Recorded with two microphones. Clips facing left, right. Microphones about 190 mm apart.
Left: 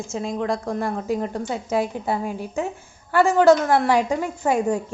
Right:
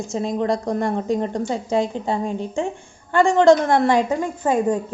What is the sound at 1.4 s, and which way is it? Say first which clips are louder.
Speech: right 3 dB; 35° right (ahead or behind).